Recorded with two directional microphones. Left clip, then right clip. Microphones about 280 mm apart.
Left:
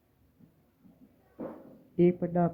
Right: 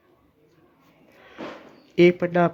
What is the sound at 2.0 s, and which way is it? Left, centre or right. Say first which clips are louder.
Speech: right 9 dB; centre.